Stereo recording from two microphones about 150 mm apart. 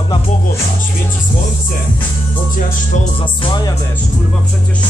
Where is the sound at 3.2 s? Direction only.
30° left (ahead or behind).